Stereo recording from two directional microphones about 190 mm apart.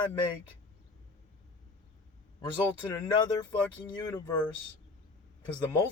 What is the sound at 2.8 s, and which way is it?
A man's voice, 25° left (ahead or behind).